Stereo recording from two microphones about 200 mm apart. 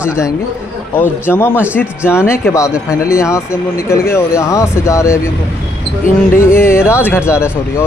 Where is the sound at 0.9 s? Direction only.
10° left (ahead or behind).